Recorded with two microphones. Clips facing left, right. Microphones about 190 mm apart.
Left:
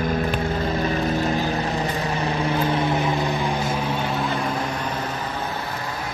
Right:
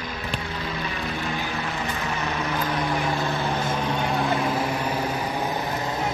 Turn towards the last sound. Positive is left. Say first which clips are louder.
# right 1 dB
turn(degrees=0)  # may be behind; listen again after turning